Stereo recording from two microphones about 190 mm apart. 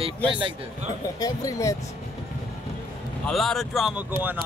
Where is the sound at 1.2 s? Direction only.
20° left (ahead or behind).